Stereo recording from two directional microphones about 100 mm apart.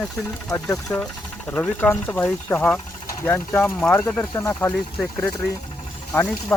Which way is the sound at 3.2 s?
20° left (ahead or behind).